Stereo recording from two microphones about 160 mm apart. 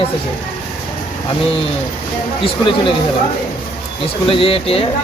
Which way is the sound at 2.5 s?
30° left (ahead or behind).